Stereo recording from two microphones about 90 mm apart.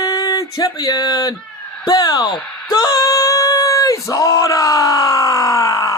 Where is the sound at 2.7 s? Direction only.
45° left (ahead or behind).